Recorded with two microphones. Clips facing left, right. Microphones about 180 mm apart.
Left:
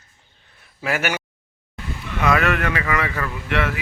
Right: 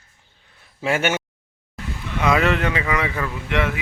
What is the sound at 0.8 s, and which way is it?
Speech, 25° right (ahead or behind).